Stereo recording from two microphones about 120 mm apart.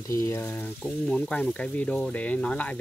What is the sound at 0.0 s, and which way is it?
Speech, 25° left (ahead or behind).